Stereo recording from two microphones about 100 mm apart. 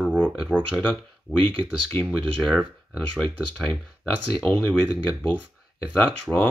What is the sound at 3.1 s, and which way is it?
Speech, 10° left (ahead or behind).